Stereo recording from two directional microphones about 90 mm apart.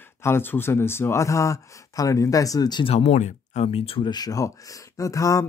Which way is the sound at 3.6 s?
90° left.